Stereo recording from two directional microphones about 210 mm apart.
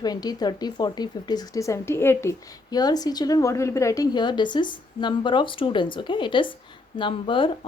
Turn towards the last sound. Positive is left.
turn(degrees=25)  # may be behind; listen again after turning